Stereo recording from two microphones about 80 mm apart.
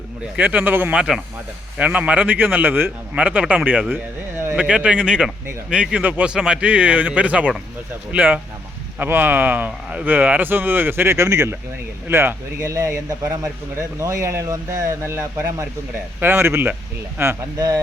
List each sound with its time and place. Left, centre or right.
0.3 s speech: right
0.9 s speech: centre
1.8 s a man's voice: centre
3.9 s a sound: right
4.5 s a man's voice: centre; by 17.3 s right